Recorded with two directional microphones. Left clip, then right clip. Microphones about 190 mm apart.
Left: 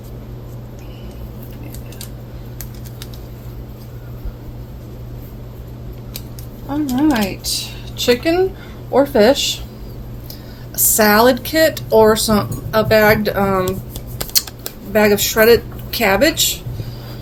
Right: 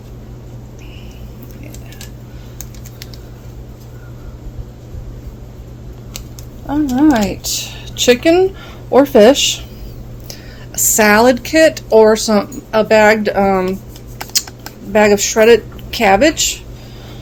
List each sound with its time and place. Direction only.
6.9 s speech: 50° right (ahead or behind)
10.8 s speech: 40° right (ahead or behind)
14.9 s speech: 30° right (ahead or behind)